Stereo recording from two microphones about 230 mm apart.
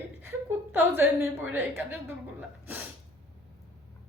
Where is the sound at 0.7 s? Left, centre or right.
Centre.